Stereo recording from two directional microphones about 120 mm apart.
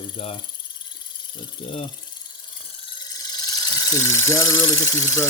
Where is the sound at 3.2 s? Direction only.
35° left (ahead or behind).